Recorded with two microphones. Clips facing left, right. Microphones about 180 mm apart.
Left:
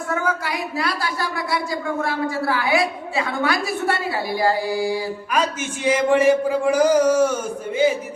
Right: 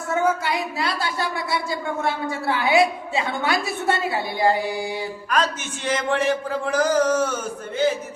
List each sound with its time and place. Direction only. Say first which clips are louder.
0.1 s speech: right 3 dB; 25° right (ahead or behind)
5.3 s a man's voice: even; 10° left (ahead or behind)